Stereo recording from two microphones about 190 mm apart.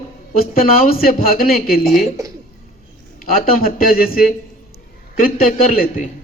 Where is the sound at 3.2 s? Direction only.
50° left (ahead or behind).